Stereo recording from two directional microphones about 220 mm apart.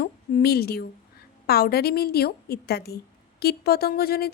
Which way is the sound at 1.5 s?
45° left (ahead or behind).